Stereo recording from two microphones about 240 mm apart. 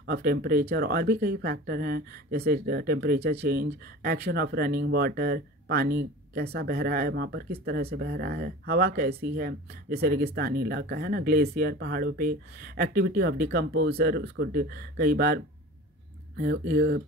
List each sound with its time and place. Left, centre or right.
0.0 s speech: right